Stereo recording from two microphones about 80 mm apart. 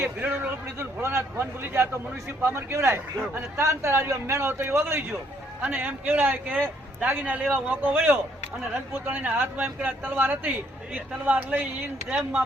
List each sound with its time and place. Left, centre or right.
0.0 s a man's voice: right
5.6 s a man's voice: right